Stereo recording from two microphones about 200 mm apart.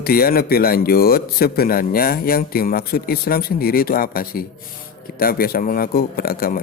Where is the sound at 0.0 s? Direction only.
50° left (ahead or behind).